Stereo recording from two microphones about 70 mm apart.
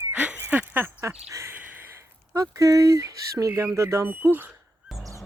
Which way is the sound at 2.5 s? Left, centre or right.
Right.